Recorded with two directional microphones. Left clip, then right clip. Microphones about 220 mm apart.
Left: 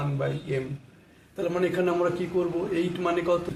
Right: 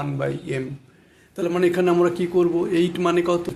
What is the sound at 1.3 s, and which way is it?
Speech, 50° right (ahead or behind).